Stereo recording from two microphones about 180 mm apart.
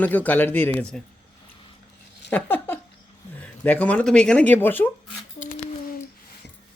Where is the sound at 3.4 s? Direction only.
10° left (ahead or behind).